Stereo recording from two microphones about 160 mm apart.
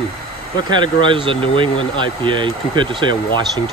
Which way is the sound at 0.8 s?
30° right (ahead or behind).